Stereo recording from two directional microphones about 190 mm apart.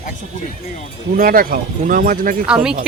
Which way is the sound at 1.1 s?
50° right (ahead or behind).